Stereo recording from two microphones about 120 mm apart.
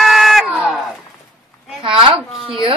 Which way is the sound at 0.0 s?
Centre (ahead or behind).